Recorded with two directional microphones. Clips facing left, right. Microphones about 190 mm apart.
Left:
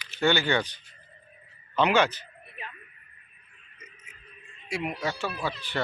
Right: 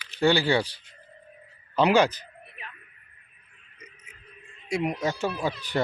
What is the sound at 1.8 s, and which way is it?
Speech, 35° right (ahead or behind).